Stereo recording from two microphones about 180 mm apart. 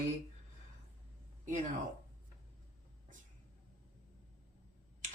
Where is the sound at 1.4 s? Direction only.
45° right (ahead or behind).